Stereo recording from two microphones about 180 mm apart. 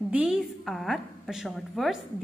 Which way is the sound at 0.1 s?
5° right (ahead or behind).